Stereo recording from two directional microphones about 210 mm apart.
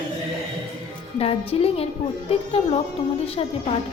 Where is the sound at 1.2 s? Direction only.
30° left (ahead or behind).